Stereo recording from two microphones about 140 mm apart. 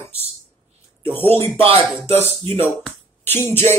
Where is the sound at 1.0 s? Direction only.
15° left (ahead or behind).